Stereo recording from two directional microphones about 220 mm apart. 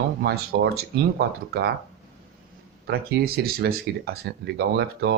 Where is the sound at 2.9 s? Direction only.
45° right (ahead or behind).